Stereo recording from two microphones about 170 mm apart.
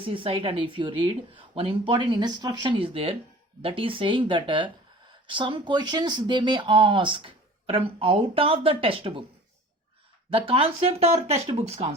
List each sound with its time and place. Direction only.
0.0 s speech: 30° right (ahead or behind)
10.2 s speech: 30° right (ahead or behind)